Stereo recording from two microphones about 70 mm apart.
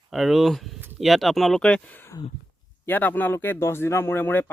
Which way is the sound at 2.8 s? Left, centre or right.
Left.